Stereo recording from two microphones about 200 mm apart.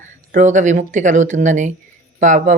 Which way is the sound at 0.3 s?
40° right (ahead or behind).